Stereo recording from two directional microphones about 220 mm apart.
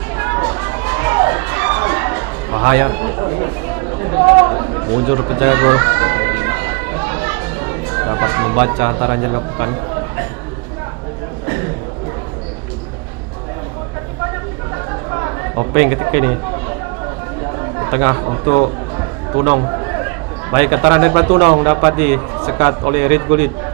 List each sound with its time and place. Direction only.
0.2 s a sound: 20° right (ahead or behind)
4.4 s music: 25° right (ahead or behind)
15.1 s chatter: 20° right (ahead or behind)
17.7 s a man's voice: 20° right (ahead or behind)